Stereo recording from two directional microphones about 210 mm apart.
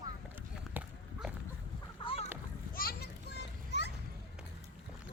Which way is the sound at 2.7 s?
45° left (ahead or behind).